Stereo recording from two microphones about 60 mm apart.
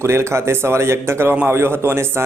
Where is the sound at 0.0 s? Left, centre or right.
Right.